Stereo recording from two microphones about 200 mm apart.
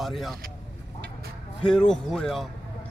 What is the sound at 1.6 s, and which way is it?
Speech, 5° left (ahead or behind).